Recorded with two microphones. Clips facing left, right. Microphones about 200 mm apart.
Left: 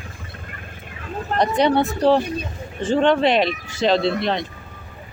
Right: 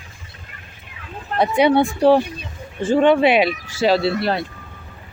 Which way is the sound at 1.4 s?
10° right (ahead or behind).